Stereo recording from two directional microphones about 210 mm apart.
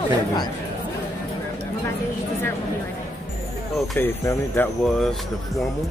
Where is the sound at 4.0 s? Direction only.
10° left (ahead or behind).